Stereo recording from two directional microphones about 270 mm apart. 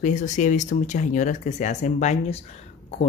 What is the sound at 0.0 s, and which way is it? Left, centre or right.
Speech, left.